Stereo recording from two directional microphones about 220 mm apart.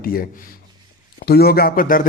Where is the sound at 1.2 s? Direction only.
45° left (ahead or behind).